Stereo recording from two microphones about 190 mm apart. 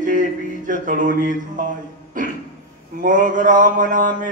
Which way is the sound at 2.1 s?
45° right (ahead or behind).